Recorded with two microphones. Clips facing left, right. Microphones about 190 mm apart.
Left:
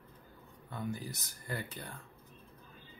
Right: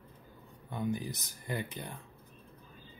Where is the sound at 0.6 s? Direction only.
15° right (ahead or behind).